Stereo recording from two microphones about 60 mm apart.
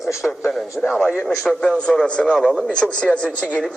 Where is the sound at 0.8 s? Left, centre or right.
Centre.